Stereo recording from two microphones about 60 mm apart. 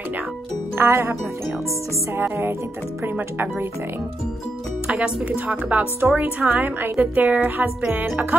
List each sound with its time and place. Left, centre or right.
0.7 s music: right
2.2 s speech: right
4.9 s a woman's voice: centre
5.9 s a woman's voice: right